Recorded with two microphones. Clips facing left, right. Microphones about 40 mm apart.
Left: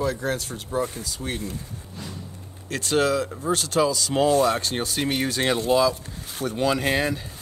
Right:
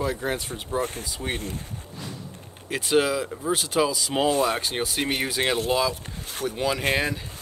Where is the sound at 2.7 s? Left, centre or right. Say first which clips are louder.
Even; centre.